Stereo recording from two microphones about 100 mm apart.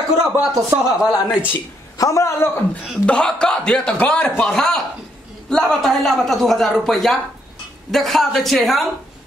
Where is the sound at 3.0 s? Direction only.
10° left (ahead or behind).